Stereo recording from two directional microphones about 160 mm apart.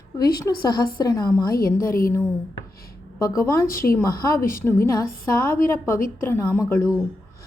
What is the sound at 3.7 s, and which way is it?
Speech, 65° left (ahead or behind).